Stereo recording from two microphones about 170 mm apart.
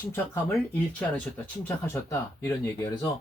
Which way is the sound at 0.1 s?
10° left (ahead or behind).